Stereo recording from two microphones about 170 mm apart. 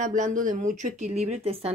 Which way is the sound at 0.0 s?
50° right (ahead or behind).